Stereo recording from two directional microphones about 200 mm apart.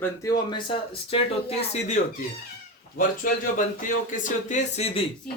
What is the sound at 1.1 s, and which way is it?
Speech, 30° left (ahead or behind).